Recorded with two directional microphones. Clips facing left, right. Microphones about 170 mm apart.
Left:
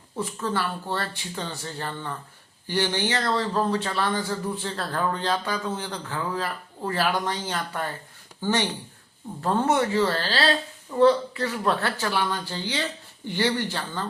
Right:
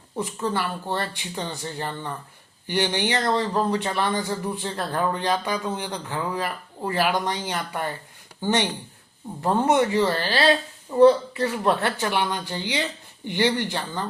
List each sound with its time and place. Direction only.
0.2 s speech: 15° right (ahead or behind)